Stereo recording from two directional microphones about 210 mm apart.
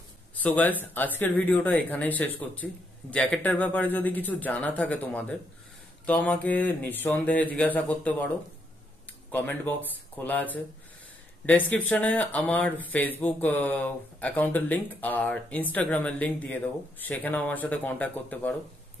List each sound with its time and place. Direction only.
0.4 s speech: 10° left (ahead or behind)
9.3 s speech: 10° left (ahead or behind)